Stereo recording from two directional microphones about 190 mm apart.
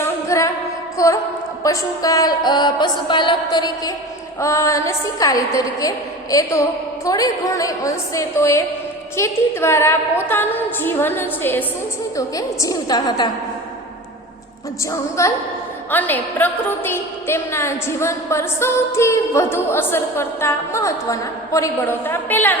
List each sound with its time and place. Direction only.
0.0 s music: 15° left (ahead or behind)
4.4 s a woman's voice: 15° left (ahead or behind)
12.1 s music: 20° left (ahead or behind)
14.8 s a woman's voice: 15° left (ahead or behind)